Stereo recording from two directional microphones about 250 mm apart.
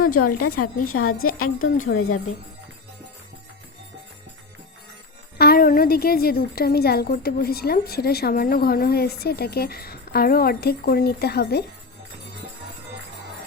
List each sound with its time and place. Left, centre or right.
0.1 s a woman's voice: left
1.5 s a woman's voice: left
1.8 s a woman's voice: left
5.4 s a woman's voice: left